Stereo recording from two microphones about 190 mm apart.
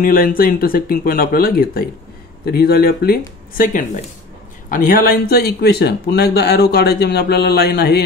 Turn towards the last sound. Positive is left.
turn(degrees=55)  # may be behind; listen again after turning